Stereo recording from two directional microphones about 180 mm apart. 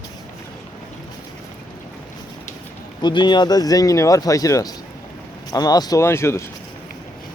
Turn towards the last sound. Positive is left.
turn(degrees=15)  # may be behind; listen again after turning